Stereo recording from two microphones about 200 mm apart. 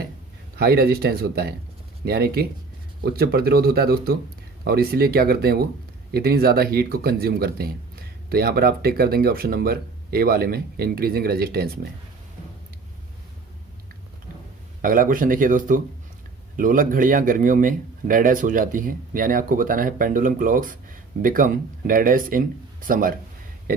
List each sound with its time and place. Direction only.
0.5 s speech: 50° right (ahead or behind)
14.8 s speech: 45° right (ahead or behind)